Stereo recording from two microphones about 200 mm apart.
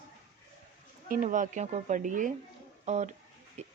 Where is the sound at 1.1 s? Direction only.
40° right (ahead or behind).